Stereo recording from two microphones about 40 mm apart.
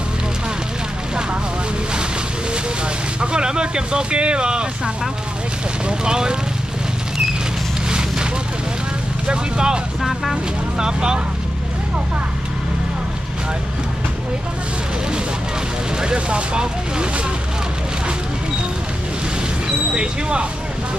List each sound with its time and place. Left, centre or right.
3.2 s speech: right
9.3 s speech: centre
16.0 s speech: right
19.9 s speech: right